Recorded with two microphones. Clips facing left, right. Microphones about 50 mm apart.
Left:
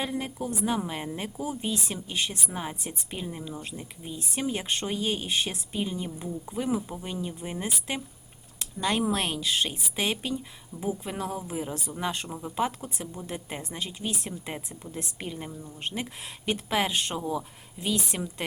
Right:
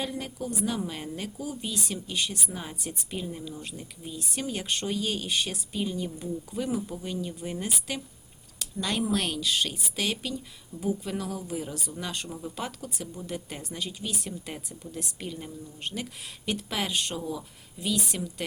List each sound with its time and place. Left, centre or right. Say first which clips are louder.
0.0 s speech: left 2 dB; left